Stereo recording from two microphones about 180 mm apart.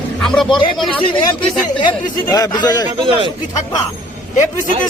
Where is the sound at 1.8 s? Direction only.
25° left (ahead or behind).